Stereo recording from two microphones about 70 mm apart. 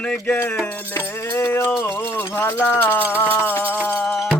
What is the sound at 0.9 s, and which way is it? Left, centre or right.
Music, left.